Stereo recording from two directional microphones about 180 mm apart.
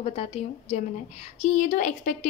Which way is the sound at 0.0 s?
35° left (ahead or behind).